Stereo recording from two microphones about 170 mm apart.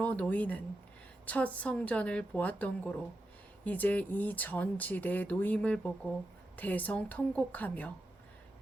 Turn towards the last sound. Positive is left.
turn(degrees=10)  # may be behind; listen again after turning